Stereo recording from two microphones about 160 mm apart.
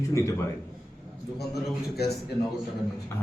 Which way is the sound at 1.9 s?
85° left.